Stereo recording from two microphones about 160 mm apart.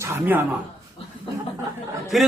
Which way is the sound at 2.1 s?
Centre (ahead or behind).